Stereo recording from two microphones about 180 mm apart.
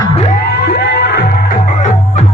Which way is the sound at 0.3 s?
60° left (ahead or behind).